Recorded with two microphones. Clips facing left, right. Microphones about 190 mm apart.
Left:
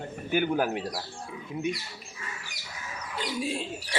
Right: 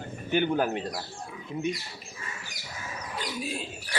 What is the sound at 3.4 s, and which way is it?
Speech, 30° left (ahead or behind).